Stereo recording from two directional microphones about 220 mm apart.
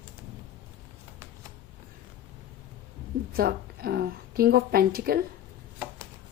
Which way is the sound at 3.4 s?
45° right (ahead or behind).